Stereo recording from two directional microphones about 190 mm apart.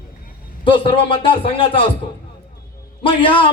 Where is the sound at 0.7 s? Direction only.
30° left (ahead or behind).